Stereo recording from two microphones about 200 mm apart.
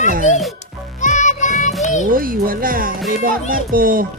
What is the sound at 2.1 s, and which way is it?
Speech, 45° right (ahead or behind).